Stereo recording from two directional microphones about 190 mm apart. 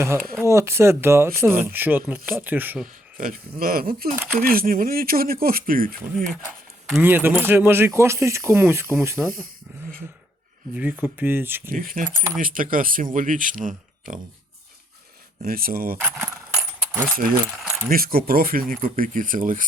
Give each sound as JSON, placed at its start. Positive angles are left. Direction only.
{"t": 0.0, "sound": "speech", "side_deg": -10}
{"t": 2.8, "sound": "a sound", "side_deg": -45}
{"t": 3.6, "sound": "speech", "side_deg": -50}
{"t": 4.1, "sound": "speech", "side_deg": -10}
{"t": 4.4, "sound": "speech", "side_deg": -50}
{"t": 7.0, "sound": "speech", "side_deg": -10}
{"t": 10.8, "sound": "speech", "side_deg": -10}
{"t": 11.7, "sound": "speech", "side_deg": -45}
{"t": 12.1, "sound": "speech", "side_deg": -15}
{"t": 12.4, "sound": "speech", "side_deg": -45}
{"t": 15.4, "sound": "speech", "side_deg": -50}
{"t": 16.0, "sound": "keys jangling", "side_deg": -10}
{"t": 16.9, "sound": "speech", "side_deg": -10}
{"t": 17.8, "sound": "speech", "side_deg": -50}